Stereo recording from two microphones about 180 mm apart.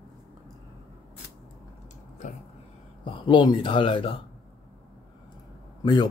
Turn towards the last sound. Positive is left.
turn(degrees=25)  # may be behind; listen again after turning